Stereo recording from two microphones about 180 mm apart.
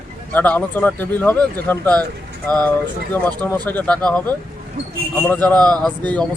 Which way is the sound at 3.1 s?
10° left (ahead or behind).